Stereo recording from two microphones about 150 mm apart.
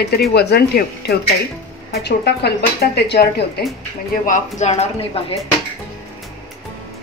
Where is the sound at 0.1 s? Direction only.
90° left.